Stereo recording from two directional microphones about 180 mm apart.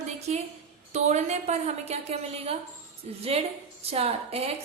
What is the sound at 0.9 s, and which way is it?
A woman's voice, 40° right (ahead or behind).